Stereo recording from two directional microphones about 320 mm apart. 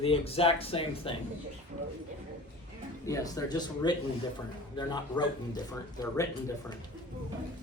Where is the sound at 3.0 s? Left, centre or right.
Centre.